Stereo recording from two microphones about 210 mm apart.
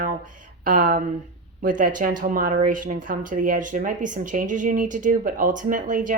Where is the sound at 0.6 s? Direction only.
40° right (ahead or behind).